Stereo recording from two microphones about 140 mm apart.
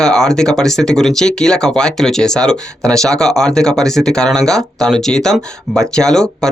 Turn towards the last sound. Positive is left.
turn(degrees=5)  # may be behind; listen again after turning